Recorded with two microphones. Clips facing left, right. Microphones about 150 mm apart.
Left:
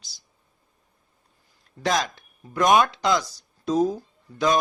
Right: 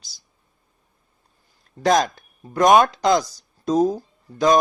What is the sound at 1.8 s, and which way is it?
Speech, 45° right (ahead or behind).